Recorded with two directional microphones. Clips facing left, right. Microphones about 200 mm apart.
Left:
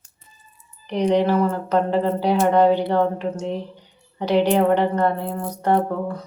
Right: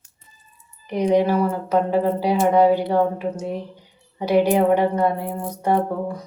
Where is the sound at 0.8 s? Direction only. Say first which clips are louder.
Even; 10° right (ahead or behind).